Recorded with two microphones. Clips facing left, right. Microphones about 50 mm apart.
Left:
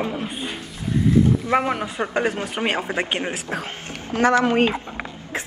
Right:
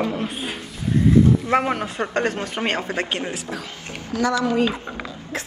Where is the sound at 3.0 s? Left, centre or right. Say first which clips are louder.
Left 1 dB; left.